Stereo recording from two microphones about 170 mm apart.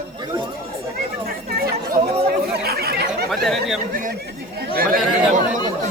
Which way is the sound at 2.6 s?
65° right (ahead or behind).